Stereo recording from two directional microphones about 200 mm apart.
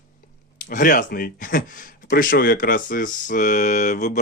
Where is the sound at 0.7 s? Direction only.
40° left (ahead or behind).